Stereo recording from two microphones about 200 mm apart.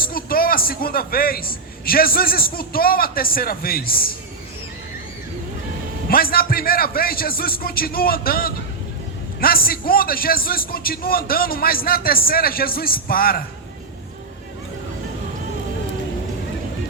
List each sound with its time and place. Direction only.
0.0 s a man's voice: 45° left (ahead or behind)
6.1 s a man's voice: 50° left (ahead or behind)